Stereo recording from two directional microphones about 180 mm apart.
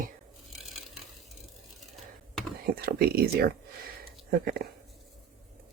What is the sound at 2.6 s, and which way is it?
Speech, 60° right (ahead or behind).